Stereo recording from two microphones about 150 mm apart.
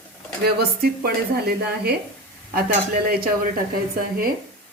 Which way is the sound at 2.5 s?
80° right.